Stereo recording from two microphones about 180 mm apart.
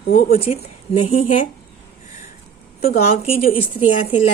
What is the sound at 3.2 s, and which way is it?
A woman's voice, 30° left (ahead or behind).